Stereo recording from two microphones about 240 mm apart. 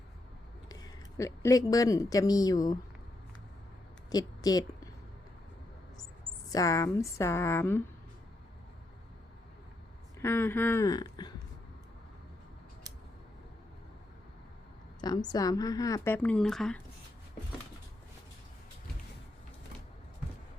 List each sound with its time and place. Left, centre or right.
0.7 s a woman's voice: centre
4.1 s a woman's voice: centre
6.5 s speech: centre
10.2 s speech: centre
15.0 s speech: centre